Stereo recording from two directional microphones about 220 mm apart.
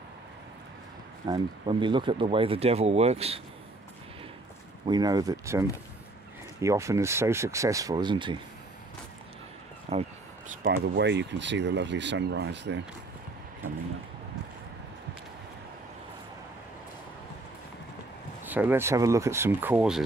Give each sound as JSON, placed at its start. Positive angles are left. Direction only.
{"t": 1.2, "sound": "speech", "side_deg": -20}
{"t": 4.8, "sound": "speech", "side_deg": -20}
{"t": 9.9, "sound": "speech", "side_deg": -30}
{"t": 10.6, "sound": "speech", "side_deg": -50}
{"t": 18.4, "sound": "speech", "side_deg": -10}